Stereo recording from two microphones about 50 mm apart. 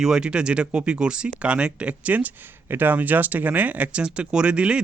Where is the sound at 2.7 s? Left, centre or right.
Right.